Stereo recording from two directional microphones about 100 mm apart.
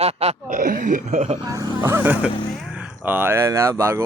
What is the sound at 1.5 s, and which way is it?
Speech, 35° right (ahead or behind).